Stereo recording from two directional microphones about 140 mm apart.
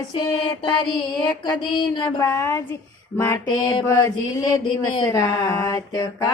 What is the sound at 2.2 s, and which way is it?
Speech, 15° left (ahead or behind).